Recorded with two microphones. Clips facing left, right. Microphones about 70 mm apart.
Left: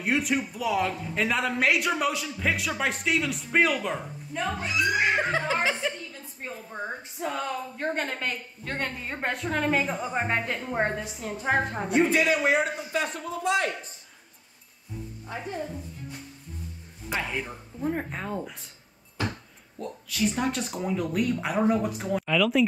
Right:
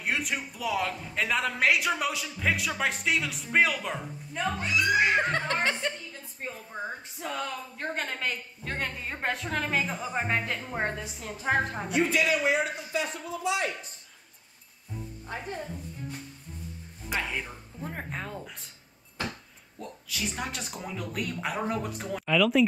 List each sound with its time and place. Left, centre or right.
0.0 s a woman's voice: centre
12.1 s a man's voice: left
17.1 s a woman's voice: centre
19.8 s a woman's voice: centre